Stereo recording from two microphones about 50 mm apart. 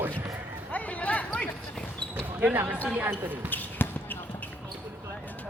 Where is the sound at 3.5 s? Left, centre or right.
Left.